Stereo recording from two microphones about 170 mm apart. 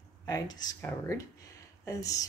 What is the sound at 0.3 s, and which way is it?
Speech, 25° left (ahead or behind).